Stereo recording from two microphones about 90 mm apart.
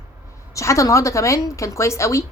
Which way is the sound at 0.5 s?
35° left (ahead or behind).